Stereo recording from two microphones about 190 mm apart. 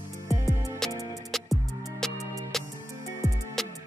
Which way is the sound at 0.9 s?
15° left (ahead or behind).